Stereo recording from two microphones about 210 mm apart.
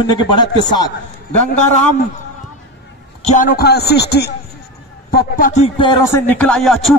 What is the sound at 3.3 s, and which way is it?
A man's voice, 40° left (ahead or behind).